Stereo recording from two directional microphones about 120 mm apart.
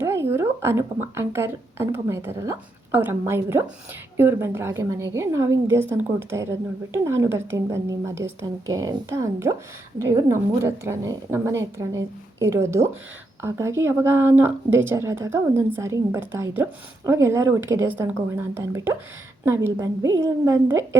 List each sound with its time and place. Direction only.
0.0 s speech: 20° right (ahead or behind)